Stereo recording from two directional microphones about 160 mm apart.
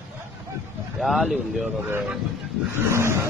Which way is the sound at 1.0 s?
Centre (ahead or behind).